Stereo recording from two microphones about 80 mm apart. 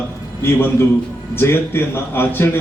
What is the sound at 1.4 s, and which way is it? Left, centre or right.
A man's voice, left.